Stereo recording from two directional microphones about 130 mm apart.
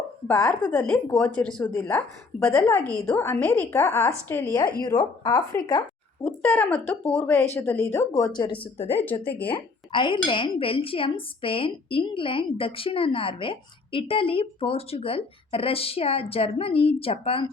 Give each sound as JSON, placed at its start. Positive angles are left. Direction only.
{"t": 0.3, "sound": "speech", "side_deg": 5}
{"t": 4.5, "sound": "speech", "side_deg": 30}
{"t": 6.2, "sound": "speech", "side_deg": 15}
{"t": 8.4, "sound": "speech", "side_deg": 40}
{"t": 9.2, "sound": "speech", "side_deg": 15}
{"t": 9.5, "sound": "speech", "side_deg": 40}